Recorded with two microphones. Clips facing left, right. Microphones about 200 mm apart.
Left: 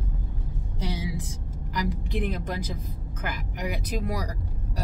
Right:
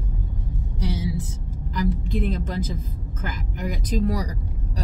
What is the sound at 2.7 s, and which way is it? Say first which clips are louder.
Speech: right 3 dB; 70° left (ahead or behind).